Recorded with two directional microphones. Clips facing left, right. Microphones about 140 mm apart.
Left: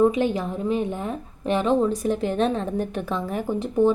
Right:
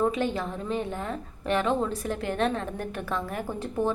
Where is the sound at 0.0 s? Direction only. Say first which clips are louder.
Left 6 dB; 15° left (ahead or behind).